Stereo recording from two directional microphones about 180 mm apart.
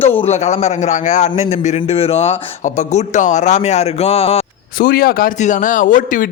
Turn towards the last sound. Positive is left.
turn(degrees=50)  # may be behind; listen again after turning